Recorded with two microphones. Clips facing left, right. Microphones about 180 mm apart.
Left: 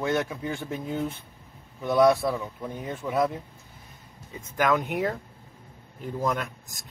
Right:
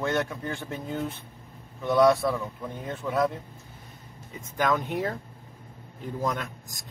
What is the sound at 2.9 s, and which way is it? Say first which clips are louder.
Speech: left 1 dB; 10° left (ahead or behind).